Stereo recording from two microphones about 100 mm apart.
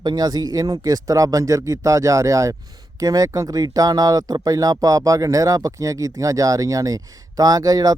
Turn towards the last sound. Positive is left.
turn(degrees=-40)  # may be behind; listen again after turning